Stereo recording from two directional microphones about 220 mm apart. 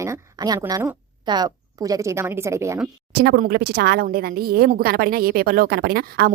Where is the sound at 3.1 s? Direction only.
45° right (ahead or behind).